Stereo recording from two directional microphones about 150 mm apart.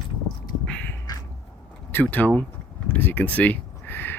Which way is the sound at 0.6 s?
5° left (ahead or behind).